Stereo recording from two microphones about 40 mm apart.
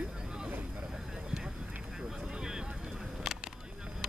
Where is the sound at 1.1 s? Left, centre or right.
Centre.